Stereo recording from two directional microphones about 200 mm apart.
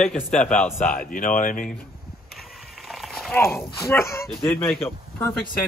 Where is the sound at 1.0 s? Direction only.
45° left (ahead or behind).